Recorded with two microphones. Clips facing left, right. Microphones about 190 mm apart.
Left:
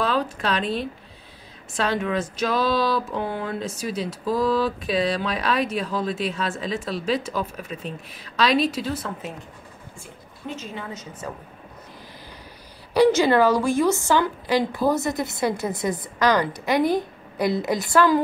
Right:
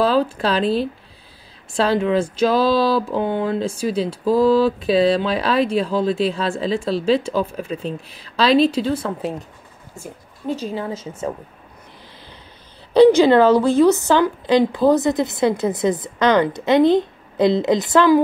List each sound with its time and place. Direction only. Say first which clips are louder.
0.0 s a woman's voice: right 6 dB; 30° right (ahead or behind)
12.9 s speech: right 6 dB; 20° right (ahead or behind)